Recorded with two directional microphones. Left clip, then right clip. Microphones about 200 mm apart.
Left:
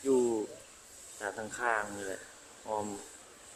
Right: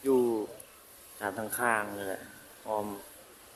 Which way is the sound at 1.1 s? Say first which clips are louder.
Right 4 dB; 15° right (ahead or behind).